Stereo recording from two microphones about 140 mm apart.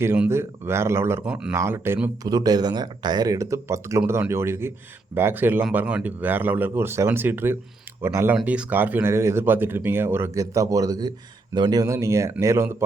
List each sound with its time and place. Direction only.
0.0 s speech: 15° right (ahead or behind)
2.3 s speech: 30° right (ahead or behind)
8.4 s speech: 10° right (ahead or behind)